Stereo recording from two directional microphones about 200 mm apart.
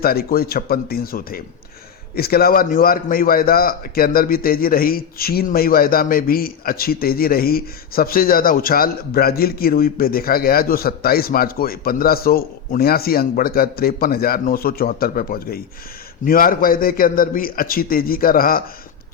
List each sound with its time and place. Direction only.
0.0 s a man's voice: 50° left (ahead or behind)